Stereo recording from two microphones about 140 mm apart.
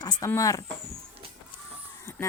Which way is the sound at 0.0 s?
30° left (ahead or behind).